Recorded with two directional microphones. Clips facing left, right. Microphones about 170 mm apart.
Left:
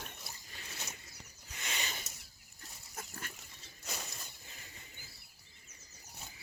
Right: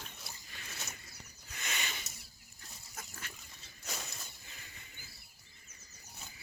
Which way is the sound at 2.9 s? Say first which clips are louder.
Left 3 dB; 45° left (ahead or behind).